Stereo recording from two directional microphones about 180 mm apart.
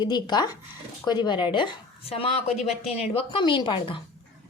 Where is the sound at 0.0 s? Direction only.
25° left (ahead or behind).